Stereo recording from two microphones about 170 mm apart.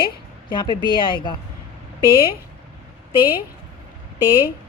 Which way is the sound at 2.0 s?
20° right (ahead or behind).